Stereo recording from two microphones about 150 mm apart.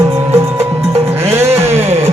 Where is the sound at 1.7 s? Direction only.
45° right (ahead or behind).